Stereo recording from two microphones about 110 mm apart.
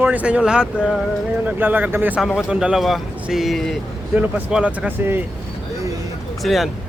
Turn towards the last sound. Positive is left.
turn(degrees=0)  # may be behind; listen again after turning